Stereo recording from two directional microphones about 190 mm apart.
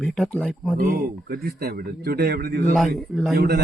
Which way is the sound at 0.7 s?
50° right (ahead or behind).